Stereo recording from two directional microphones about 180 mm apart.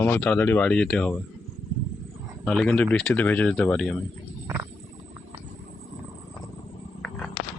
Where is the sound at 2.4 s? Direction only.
5° left (ahead or behind).